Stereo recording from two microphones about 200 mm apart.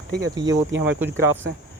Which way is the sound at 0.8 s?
10° right (ahead or behind).